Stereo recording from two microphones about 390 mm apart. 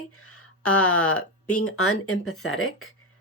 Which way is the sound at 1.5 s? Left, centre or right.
Left.